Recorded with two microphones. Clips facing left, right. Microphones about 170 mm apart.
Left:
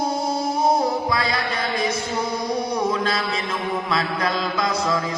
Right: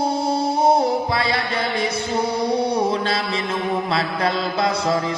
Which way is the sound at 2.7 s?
30° right (ahead or behind).